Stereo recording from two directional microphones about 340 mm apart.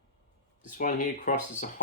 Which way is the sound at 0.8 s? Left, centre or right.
Left.